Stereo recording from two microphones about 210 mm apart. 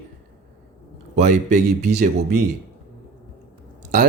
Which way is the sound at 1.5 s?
35° right (ahead or behind).